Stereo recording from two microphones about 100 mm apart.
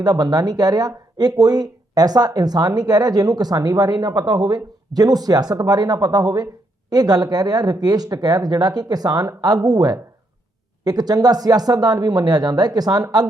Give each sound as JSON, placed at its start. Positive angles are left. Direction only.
{"t": 0.0, "sound": "speech", "side_deg": -40}